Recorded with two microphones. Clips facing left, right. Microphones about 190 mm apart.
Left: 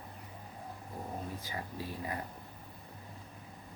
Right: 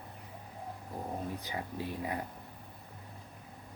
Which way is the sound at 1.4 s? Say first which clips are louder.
Right 3 dB; 15° right (ahead or behind).